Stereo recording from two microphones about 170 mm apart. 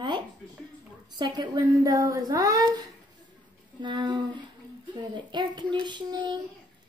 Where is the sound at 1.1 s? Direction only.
25° right (ahead or behind).